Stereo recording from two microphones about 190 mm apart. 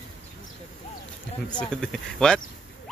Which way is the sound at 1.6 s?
5° left (ahead or behind).